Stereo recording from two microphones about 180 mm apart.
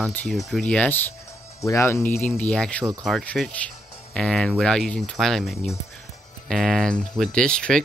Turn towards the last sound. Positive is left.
turn(degrees=5)  # may be behind; listen again after turning